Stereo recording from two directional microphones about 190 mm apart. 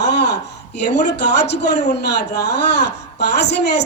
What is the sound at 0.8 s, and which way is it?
A woman's voice, 60° left (ahead or behind).